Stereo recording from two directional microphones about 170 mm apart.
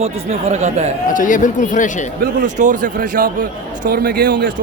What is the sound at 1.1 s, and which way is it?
Speech, 50° left (ahead or behind).